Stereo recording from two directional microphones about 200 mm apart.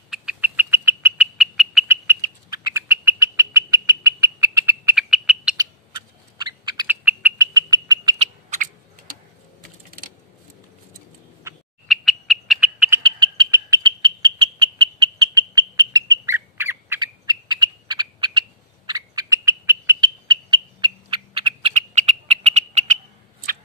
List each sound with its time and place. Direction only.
0.1 s bird: 5° right (ahead or behind)
2.0 s bird: 15° right (ahead or behind)
5.6 s a sound: 20° right (ahead or behind)
6.6 s owl: 20° right (ahead or behind)
6.9 s bird: 10° right (ahead or behind)
7.5 s frog: 20° right (ahead or behind)
8.2 s owl: 40° right (ahead or behind)
11.9 s frog: centre (ahead or behind)
13.0 s frog: 20° right (ahead or behind)